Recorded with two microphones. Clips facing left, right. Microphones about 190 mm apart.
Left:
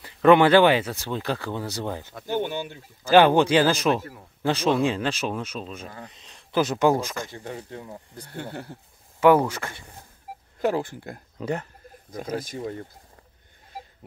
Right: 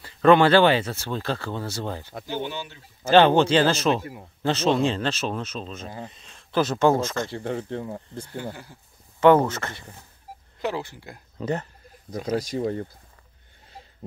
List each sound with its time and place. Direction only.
0.0 s speech: 15° left (ahead or behind)
2.2 s speech: 50° left (ahead or behind)
3.1 s speech: 10° left (ahead or behind)
3.9 s a man's voice: 20° right (ahead or behind)
4.4 s speech: 10° left (ahead or behind)
5.9 s speech: 25° right (ahead or behind)
6.2 s speech: 15° left (ahead or behind)
7.7 s speech: 20° right (ahead or behind)
8.4 s speech: 60° left (ahead or behind)
9.2 s speech: 10° left (ahead or behind)
10.6 s speech: 50° left (ahead or behind)
11.4 s speech: 10° left (ahead or behind)
12.2 s speech: 50° left (ahead or behind)